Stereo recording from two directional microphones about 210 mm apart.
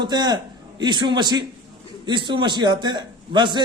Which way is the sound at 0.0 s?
20° right (ahead or behind).